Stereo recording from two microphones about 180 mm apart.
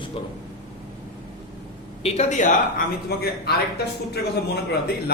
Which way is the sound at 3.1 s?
60° left (ahead or behind).